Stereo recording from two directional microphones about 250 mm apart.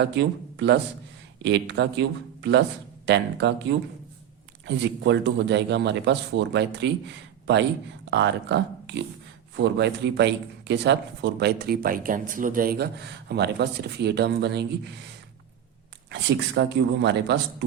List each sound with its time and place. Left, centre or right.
0.0 s a man's voice: right
8.1 s a man's voice: right
16.0 s a man's voice: right